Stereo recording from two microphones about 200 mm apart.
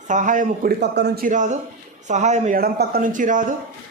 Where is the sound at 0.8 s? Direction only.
55° right (ahead or behind).